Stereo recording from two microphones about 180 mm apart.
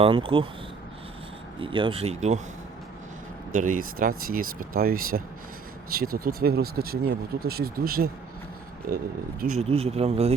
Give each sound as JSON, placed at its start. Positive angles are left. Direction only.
{"t": 0.0, "sound": "speech", "side_deg": -30}
{"t": 1.5, "sound": "speech", "side_deg": -30}
{"t": 3.5, "sound": "speech", "side_deg": -45}
{"t": 9.6, "sound": "speech", "side_deg": -35}